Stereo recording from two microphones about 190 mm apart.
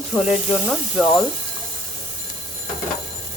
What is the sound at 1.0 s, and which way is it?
Speech, 5° right (ahead or behind).